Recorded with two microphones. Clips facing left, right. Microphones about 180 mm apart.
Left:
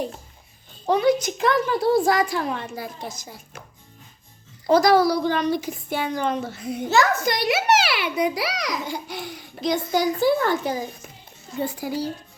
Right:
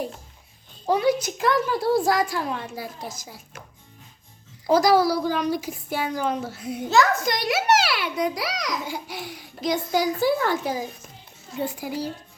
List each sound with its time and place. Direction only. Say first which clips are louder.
0.9 s a woman's voice: left 2 dB; 5° right (ahead or behind)
4.6 s a woman's voice: left 2 dB; 5° right (ahead or behind)
8.4 s a child's voice: left 2 dB; 65° left (ahead or behind)
8.8 s a woman's voice: left 2 dB; 5° right (ahead or behind)